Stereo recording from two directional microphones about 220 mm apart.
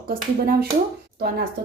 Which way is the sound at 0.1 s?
40° right (ahead or behind).